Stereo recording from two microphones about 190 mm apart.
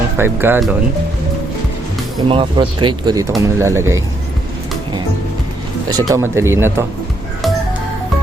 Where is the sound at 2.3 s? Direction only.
30° right (ahead or behind).